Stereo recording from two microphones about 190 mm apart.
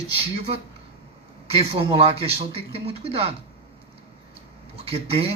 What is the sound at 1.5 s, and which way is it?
Speech, 30° right (ahead or behind).